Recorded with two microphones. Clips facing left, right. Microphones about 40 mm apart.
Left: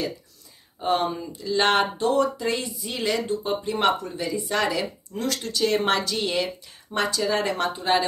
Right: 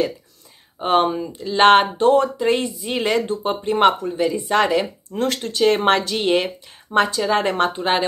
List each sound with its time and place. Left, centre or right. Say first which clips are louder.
0.7 s speech: right 6 dB; right